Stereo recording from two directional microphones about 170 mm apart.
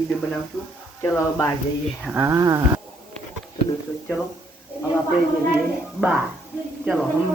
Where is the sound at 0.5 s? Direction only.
Centre (ahead or behind).